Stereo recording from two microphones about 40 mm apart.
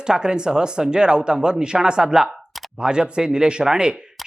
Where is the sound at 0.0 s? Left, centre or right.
Centre.